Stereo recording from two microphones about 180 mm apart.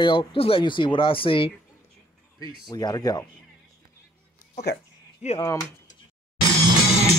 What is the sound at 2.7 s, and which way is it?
Speech, 20° left (ahead or behind).